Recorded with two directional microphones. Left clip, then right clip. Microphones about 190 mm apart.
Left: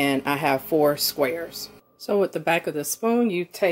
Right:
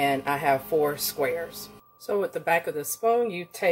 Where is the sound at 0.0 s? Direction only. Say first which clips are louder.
Left 1 dB; 50° left (ahead or behind).